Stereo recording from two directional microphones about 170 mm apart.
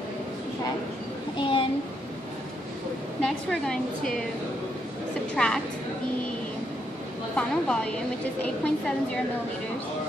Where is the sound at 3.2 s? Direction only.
5° left (ahead or behind).